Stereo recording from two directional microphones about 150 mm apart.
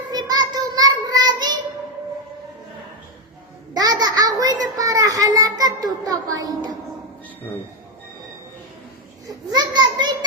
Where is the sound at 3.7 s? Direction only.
25° right (ahead or behind).